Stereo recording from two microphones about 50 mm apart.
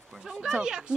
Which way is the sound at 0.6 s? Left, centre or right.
Centre.